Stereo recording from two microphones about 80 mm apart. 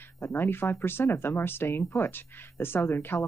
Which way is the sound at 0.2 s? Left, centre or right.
Left.